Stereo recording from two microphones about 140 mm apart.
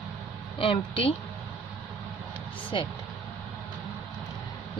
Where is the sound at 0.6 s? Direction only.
40° left (ahead or behind).